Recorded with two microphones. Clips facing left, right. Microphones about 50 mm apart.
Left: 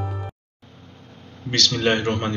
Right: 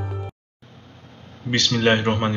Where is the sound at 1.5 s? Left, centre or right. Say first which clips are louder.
Right 2 dB; centre.